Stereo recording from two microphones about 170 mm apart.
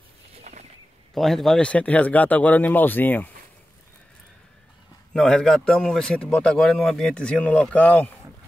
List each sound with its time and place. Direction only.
0.4 s a sound: 40° right (ahead or behind)
1.1 s speech: centre (ahead or behind)
5.1 s a man's voice: centre (ahead or behind)